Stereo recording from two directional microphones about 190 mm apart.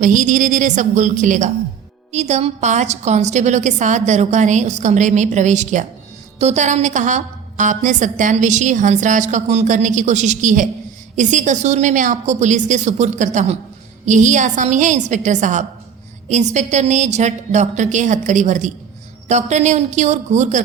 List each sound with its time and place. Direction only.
0.0 s a woman's voice: 40° right (ahead or behind)